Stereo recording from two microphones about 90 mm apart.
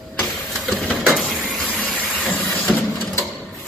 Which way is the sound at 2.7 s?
20° left (ahead or behind).